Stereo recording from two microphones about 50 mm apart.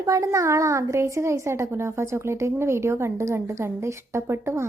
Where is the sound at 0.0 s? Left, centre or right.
Right.